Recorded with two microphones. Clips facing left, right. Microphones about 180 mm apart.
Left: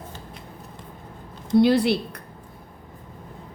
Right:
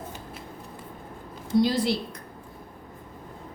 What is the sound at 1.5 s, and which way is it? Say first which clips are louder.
Speech: left 5 dB; 60° left (ahead or behind).